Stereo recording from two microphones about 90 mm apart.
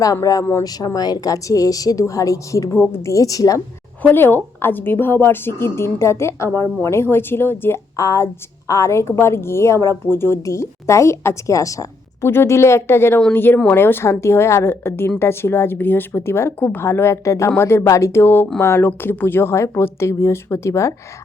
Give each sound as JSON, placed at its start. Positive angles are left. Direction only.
{"t": 0.0, "sound": "a woman's voice", "side_deg": 40}
{"t": 4.1, "sound": "a woman's voice", "side_deg": 20}
{"t": 7.9, "sound": "a woman's voice", "side_deg": 35}